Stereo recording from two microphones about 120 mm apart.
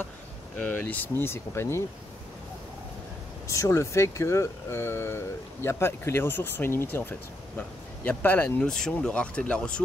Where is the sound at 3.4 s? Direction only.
25° left (ahead or behind).